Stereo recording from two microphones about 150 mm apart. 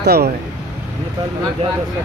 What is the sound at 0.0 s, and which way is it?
Speech, 90° right.